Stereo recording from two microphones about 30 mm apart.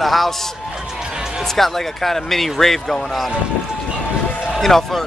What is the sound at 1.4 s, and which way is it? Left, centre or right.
Speech, centre.